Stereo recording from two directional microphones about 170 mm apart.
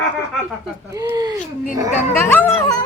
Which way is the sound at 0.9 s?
20° right (ahead or behind).